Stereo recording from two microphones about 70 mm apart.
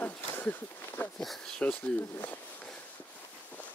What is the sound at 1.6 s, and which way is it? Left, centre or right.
Speech, centre.